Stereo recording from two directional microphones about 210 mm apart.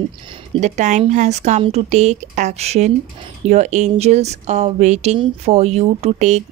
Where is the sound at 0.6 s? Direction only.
35° right (ahead or behind).